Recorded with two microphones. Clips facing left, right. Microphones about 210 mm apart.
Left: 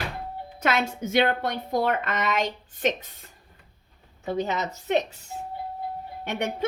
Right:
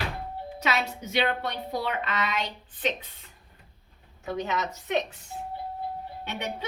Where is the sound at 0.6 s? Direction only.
50° left (ahead or behind).